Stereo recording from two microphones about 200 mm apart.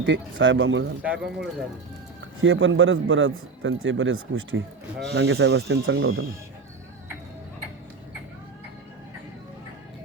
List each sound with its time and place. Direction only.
0.0 s a man's voice: 70° right (ahead or behind)
1.0 s speech: 5° right (ahead or behind)
2.4 s a man's voice: 75° right (ahead or behind)
5.1 s speech: 60° right (ahead or behind)